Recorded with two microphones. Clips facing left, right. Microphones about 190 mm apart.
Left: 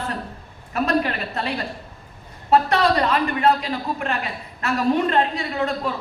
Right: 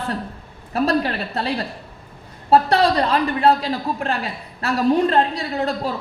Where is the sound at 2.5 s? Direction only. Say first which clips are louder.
Right 2 dB; 35° right (ahead or behind).